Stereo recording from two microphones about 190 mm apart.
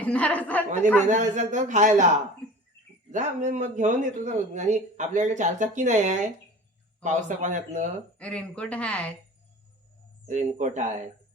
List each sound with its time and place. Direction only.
0.0 s a woman's voice: 5° left (ahead or behind)
1.0 s speech: 40° right (ahead or behind)
3.1 s speech: 40° right (ahead or behind)
8.2 s speech: 5° left (ahead or behind)
10.2 s speech: 40° right (ahead or behind)